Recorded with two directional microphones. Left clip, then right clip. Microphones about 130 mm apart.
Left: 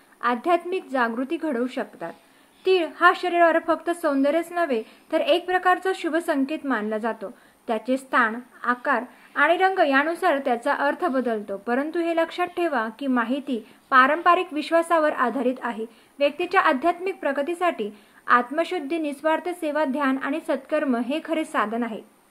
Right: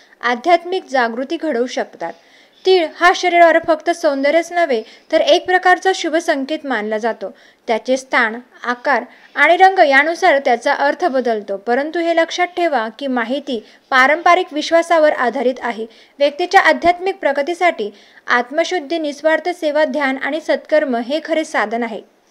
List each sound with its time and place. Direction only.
0.2 s a woman's voice: 50° right (ahead or behind)